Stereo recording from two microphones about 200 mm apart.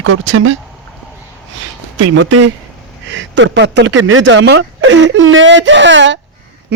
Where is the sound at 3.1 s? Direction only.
65° right (ahead or behind).